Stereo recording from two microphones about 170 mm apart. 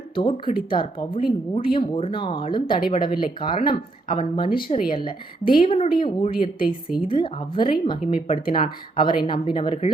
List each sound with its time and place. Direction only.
0.2 s speech: 30° left (ahead or behind)